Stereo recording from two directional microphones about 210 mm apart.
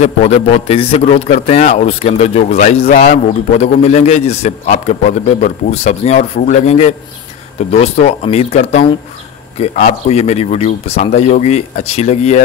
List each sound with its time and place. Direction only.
0.0 s a man's voice: 30° left (ahead or behind)